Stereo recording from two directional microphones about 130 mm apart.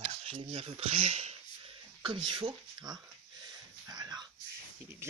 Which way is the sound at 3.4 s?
30° right (ahead or behind).